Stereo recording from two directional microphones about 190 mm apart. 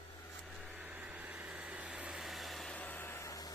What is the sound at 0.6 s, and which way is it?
Vehicle, 5° right (ahead or behind).